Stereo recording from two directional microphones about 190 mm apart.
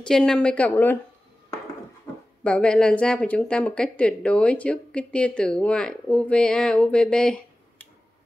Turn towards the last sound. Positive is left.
turn(degrees=5)  # may be behind; listen again after turning